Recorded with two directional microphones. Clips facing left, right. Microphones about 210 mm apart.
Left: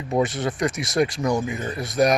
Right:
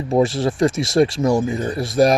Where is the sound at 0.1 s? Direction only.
25° right (ahead or behind).